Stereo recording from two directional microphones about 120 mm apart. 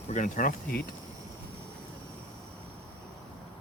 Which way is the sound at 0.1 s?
90° left.